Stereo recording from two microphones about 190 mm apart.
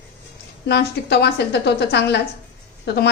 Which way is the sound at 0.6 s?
60° left (ahead or behind).